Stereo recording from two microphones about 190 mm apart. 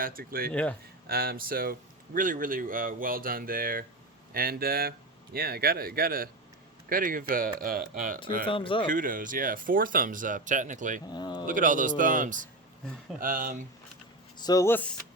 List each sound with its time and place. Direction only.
0.0 s speech: 50° right (ahead or behind)
0.5 s speech: 5° left (ahead or behind)
1.0 s speech: 50° right (ahead or behind)
8.4 s speech: 25° left (ahead or behind)
8.9 s speech: 45° right (ahead or behind)
11.1 s speech: 20° left (ahead or behind)
11.4 s speech: 45° right (ahead or behind)
14.3 s speech: 20° left (ahead or behind)